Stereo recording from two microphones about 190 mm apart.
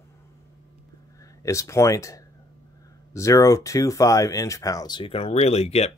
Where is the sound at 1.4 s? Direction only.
15° left (ahead or behind); by 5.9 s 35° left (ahead or behind).